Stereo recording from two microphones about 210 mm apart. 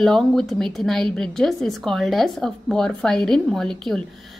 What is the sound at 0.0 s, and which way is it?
A woman's voice, centre (ahead or behind).